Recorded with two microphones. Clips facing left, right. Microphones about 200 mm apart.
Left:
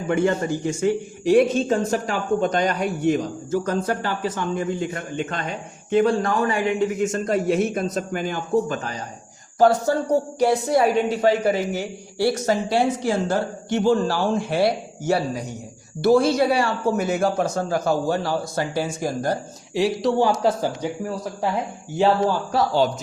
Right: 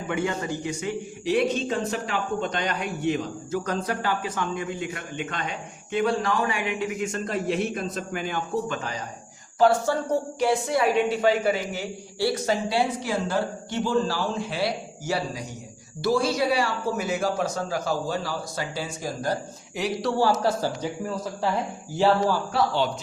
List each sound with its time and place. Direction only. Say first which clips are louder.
0.1 s a man's voice: left 7 dB; 45° left (ahead or behind)
19.7 s speech: left 6 dB; 25° left (ahead or behind)
21.9 s speech: left 2 dB; 15° left (ahead or behind)
22.5 s speech: left 6 dB; 40° left (ahead or behind)